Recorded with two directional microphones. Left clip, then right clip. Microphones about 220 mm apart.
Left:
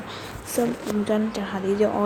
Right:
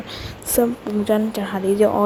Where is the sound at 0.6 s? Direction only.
10° right (ahead or behind).